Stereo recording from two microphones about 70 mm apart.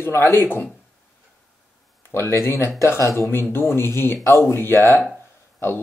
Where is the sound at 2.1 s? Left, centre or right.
Left.